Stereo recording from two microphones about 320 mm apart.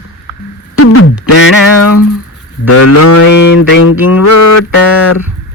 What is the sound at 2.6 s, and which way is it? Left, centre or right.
Cattle, left.